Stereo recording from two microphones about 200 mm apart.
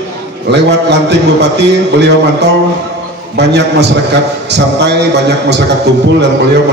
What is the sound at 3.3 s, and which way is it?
A man's voice, 55° right (ahead or behind).